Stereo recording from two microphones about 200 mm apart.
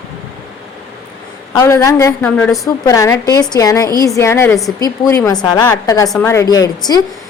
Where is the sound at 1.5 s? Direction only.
15° left (ahead or behind).